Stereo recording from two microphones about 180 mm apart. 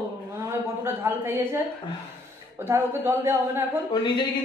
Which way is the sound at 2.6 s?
15° right (ahead or behind).